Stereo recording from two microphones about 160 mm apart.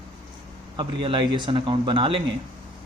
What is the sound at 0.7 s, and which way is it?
Speech, 30° right (ahead or behind).